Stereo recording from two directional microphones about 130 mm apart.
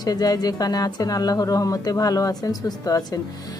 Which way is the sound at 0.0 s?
30° left (ahead or behind).